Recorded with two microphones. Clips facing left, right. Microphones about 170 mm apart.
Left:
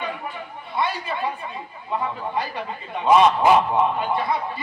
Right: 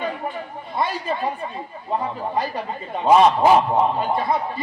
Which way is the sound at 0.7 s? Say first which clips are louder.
Right 2 dB; 40° right (ahead or behind).